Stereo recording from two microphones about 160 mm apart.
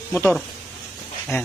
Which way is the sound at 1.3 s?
15° left (ahead or behind).